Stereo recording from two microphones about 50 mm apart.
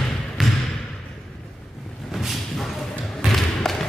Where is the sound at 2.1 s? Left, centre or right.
Centre.